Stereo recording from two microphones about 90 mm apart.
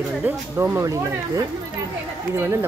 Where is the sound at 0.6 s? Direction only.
30° right (ahead or behind).